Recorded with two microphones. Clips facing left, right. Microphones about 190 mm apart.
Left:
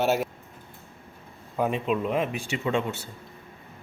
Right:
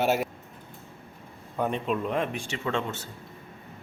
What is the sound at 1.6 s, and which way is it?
Speech, 5° left (ahead or behind).